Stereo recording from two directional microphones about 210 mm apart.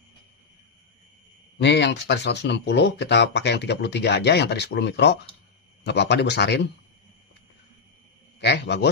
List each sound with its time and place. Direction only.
1.6 s speech: 55° left (ahead or behind)
8.4 s speech: 55° left (ahead or behind)